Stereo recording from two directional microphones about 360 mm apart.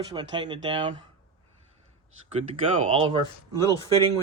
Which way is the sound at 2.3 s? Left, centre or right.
Centre.